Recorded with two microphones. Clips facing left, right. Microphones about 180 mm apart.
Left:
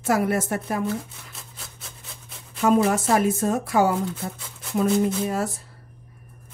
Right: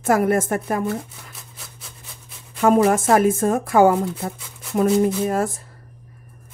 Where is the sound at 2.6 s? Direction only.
50° right (ahead or behind).